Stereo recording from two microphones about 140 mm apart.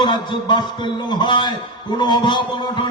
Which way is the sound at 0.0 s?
35° left (ahead or behind).